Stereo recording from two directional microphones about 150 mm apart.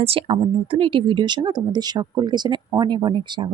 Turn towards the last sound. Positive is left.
turn(degrees=-30)  # may be behind; listen again after turning